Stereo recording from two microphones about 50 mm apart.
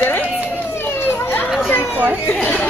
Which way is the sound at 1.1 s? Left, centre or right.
Left.